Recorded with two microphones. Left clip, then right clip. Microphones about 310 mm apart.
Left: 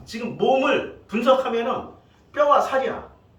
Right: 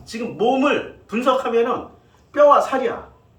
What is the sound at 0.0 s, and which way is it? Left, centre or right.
A man's voice, centre.